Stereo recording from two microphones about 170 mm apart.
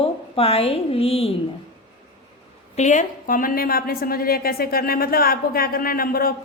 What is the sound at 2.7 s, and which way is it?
A woman's voice, 45° left (ahead or behind).